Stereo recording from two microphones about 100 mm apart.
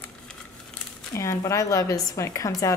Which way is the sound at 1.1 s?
30° left (ahead or behind).